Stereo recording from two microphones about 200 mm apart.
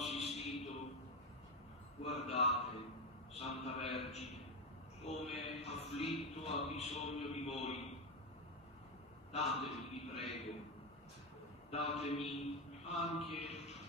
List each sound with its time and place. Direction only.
0.0 s a sound: 30° left (ahead or behind)
2.0 s a man's voice: 30° left (ahead or behind)
9.3 s a man's voice: 30° left (ahead or behind)
11.7 s a man's voice: 30° left (ahead or behind)